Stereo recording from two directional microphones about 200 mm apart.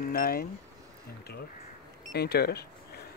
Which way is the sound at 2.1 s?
55° left (ahead or behind).